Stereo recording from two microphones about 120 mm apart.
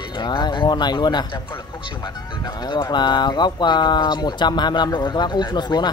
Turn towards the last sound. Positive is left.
turn(degrees=35)  # may be behind; listen again after turning